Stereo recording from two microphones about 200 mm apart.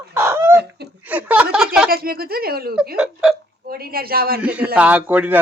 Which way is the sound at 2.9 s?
5° right (ahead or behind).